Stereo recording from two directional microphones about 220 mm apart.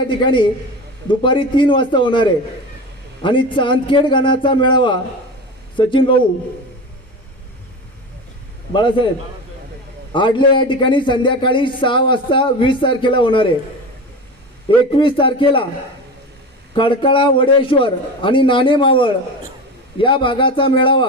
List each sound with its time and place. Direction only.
0.3 s a man's voice: 20° left (ahead or behind)
8.7 s a man's voice: 20° left (ahead or behind)
10.1 s a man's voice: 20° left (ahead or behind)
14.9 s a man's voice: 20° left (ahead or behind)
16.7 s a man's voice: 20° left (ahead or behind)